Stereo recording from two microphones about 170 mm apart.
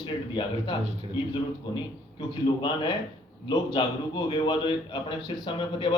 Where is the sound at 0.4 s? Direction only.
30° left (ahead or behind).